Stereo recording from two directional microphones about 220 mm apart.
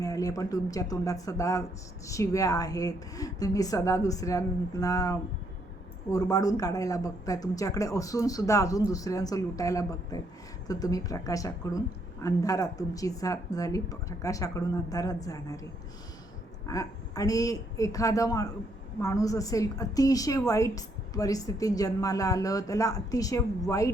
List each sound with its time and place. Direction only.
0.0 s a woman's voice: 15° left (ahead or behind)
16.6 s a woman's voice: 15° left (ahead or behind)